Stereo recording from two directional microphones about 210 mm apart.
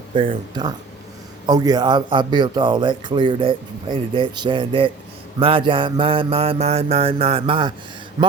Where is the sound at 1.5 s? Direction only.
20° right (ahead or behind).